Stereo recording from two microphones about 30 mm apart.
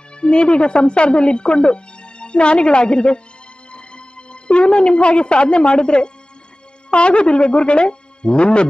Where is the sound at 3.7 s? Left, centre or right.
Left.